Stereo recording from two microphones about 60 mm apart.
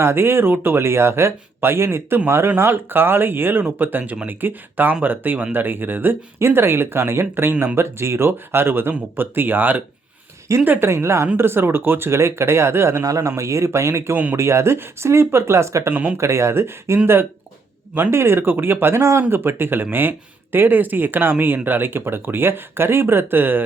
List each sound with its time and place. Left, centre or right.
0.0 s speech: right
3.9 s speech: right
10.8 s speech: right
13.1 s speech: right
15.9 s speech: right
16.1 s speech: right